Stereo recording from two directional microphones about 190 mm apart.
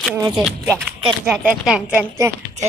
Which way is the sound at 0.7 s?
10° right (ahead or behind).